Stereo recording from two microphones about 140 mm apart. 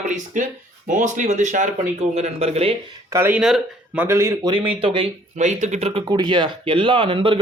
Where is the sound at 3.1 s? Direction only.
15° right (ahead or behind).